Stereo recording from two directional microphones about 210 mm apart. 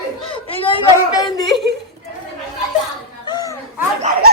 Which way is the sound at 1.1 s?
20° left (ahead or behind).